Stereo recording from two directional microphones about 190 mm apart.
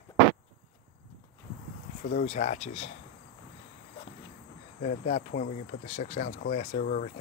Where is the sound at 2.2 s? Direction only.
35° left (ahead or behind).